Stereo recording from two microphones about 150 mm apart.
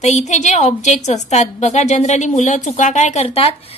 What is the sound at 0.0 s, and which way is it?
A woman's voice, 50° left (ahead or behind).